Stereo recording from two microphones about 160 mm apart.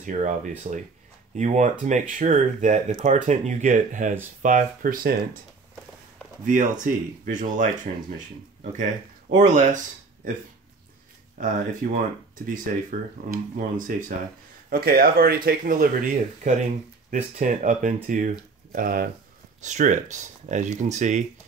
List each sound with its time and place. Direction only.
0.0 s speech: 50° right (ahead or behind)
6.4 s speech: 55° right (ahead or behind)
9.3 s speech: 50° right (ahead or behind)
11.3 s speech: 55° right (ahead or behind)
13.3 s speech: 55° right (ahead or behind)
14.7 s speech: 70° right (ahead or behind)
16.5 s speech: 50° right (ahead or behind)
18.7 s speech: 65° right (ahead or behind)
19.6 s speech: 50° right (ahead or behind)